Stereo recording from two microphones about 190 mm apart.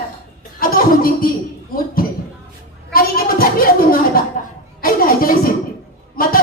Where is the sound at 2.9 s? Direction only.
50° left (ahead or behind).